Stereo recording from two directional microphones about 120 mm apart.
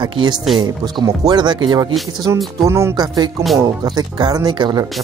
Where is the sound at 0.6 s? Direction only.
35° right (ahead or behind).